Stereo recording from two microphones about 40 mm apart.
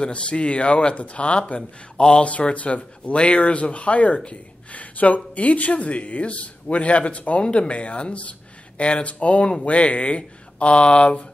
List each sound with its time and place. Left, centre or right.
0.0 s speech: left